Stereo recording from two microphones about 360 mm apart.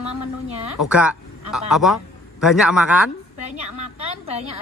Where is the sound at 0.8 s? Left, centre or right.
Centre.